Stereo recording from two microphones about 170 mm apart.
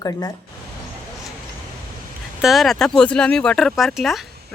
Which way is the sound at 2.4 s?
Centre (ahead or behind).